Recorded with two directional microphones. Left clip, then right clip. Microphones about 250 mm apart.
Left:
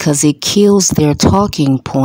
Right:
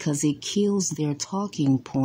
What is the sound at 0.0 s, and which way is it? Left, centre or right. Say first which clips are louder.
Speech: left 13 dB; left.